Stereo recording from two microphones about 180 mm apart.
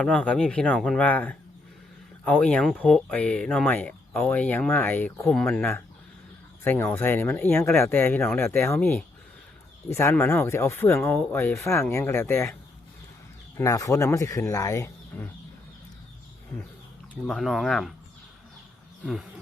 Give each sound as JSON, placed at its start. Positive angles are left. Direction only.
{"t": 0.0, "sound": "speech", "side_deg": 5}
{"t": 13.6, "sound": "speech", "side_deg": 15}
{"t": 17.2, "sound": "speech", "side_deg": 0}